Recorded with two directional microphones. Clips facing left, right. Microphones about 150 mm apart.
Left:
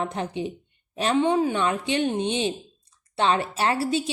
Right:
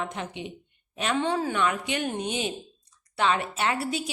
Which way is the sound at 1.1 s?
20° left (ahead or behind).